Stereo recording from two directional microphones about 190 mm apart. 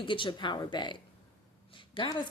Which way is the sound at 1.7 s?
25° left (ahead or behind).